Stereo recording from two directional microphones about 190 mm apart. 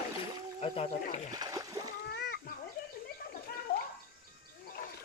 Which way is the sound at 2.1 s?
60° left (ahead or behind).